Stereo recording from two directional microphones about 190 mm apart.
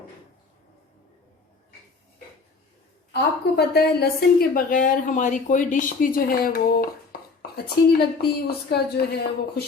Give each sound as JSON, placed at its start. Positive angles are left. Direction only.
{"t": 3.1, "sound": "a woman's voice", "side_deg": 60}